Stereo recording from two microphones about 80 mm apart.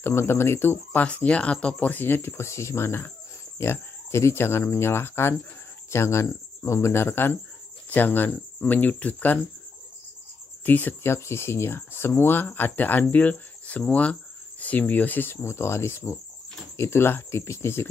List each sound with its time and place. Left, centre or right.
0.0 s speech: left
1.0 s speech: centre
10.6 s speech: left